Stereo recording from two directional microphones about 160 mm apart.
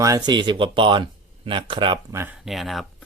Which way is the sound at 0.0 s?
25° right (ahead or behind).